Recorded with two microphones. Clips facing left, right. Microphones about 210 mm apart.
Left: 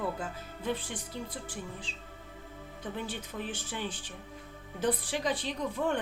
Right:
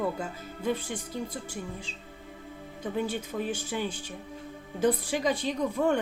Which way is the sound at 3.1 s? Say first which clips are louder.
Right 6 dB; 45° right (ahead or behind).